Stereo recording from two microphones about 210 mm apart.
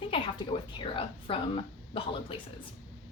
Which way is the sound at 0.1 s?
25° left (ahead or behind).